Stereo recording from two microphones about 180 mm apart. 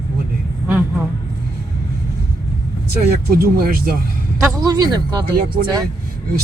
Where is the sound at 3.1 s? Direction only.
60° right (ahead or behind).